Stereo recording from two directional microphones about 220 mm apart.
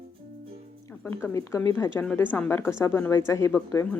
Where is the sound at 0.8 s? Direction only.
10° left (ahead or behind).